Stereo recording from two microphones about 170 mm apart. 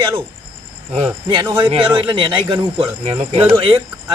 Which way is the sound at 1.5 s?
30° right (ahead or behind).